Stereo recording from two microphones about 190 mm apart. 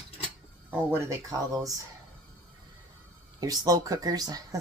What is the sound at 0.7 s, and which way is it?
Speech, 15° right (ahead or behind).